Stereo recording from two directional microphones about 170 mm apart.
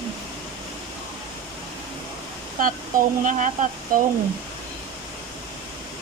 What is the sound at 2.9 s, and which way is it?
Speech, 55° right (ahead or behind).